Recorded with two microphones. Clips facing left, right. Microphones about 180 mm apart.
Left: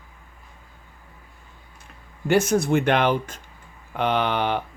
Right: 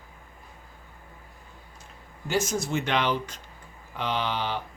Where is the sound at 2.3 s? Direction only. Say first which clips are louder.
Left 8 dB; 60° left (ahead or behind).